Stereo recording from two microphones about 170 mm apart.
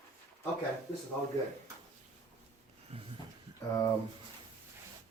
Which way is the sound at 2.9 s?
35° right (ahead or behind).